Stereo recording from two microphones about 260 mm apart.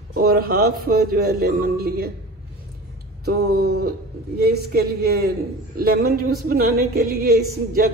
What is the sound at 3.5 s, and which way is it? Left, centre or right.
A man's voice, right.